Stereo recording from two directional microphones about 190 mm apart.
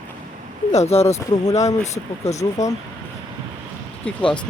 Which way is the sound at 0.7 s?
35° left (ahead or behind).